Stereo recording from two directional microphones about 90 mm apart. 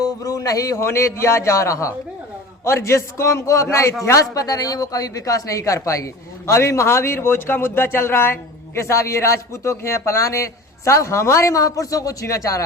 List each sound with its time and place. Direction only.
0.0 s speech: 40° left (ahead or behind)